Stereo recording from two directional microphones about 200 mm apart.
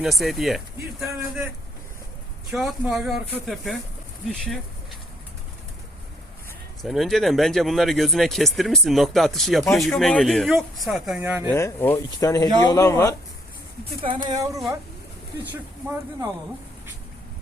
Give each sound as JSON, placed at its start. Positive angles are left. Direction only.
{"t": 0.0, "sound": "speech", "side_deg": 0}
{"t": 2.5, "sound": "speech", "side_deg": -5}
{"t": 6.8, "sound": "speech", "side_deg": 0}
{"t": 11.2, "sound": "speech", "side_deg": -15}
{"t": 11.4, "sound": "speech", "side_deg": 15}
{"t": 14.0, "sound": "a woman's voice", "side_deg": -25}